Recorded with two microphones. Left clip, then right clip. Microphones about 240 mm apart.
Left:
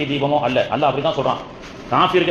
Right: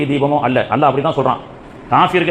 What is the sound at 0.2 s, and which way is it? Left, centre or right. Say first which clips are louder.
A man's voice: right 2 dB; right.